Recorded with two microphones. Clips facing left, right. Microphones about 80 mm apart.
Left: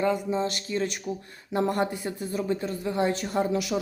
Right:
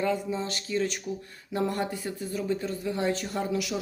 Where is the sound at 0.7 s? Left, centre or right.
Left.